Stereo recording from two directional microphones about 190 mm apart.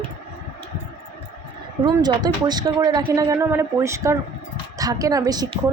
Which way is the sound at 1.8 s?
20° right (ahead or behind).